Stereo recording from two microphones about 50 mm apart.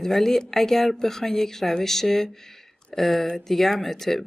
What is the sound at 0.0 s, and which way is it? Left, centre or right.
Speech, centre.